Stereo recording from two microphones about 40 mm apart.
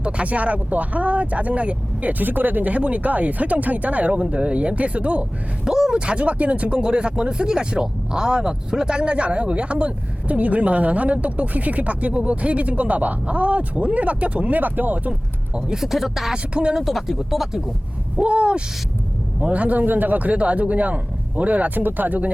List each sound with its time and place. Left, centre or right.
0.0 s speech: right
5.6 s speech: centre
5.9 s speech: right
15.5 s speech: right
15.8 s speech: centre
16.3 s speech: right
16.8 s speech: centre
18.2 s speech: right